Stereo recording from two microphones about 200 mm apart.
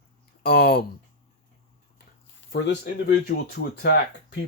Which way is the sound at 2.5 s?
60° left (ahead or behind).